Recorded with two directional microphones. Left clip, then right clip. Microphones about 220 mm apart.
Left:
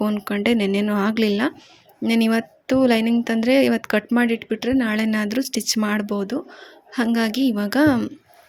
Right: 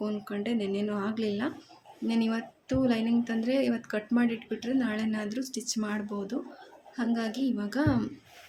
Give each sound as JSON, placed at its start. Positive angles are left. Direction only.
{"t": 0.0, "sound": "a woman's voice", "side_deg": 40}